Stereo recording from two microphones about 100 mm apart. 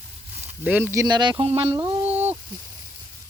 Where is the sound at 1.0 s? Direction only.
45° right (ahead or behind).